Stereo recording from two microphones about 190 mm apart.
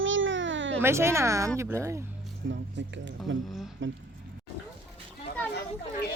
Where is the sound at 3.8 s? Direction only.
85° right.